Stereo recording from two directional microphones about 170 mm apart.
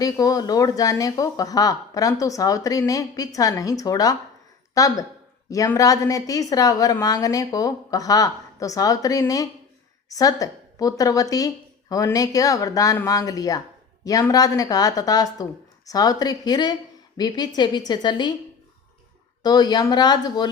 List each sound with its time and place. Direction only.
0.0 s a woman's voice: 20° left (ahead or behind)
19.4 s speech: 25° left (ahead or behind)